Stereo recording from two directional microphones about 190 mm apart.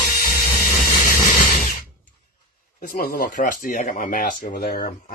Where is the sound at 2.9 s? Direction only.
50° left (ahead or behind).